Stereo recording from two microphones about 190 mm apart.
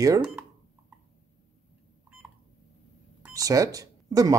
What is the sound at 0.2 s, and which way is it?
Cash register, 5° right (ahead or behind).